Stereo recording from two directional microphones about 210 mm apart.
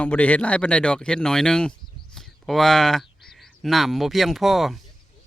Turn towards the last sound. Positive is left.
turn(degrees=0)  # may be behind; listen again after turning